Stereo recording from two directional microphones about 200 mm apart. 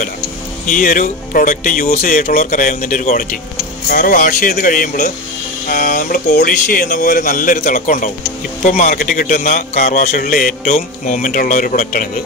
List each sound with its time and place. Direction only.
0.7 s speech: 40° left (ahead or behind)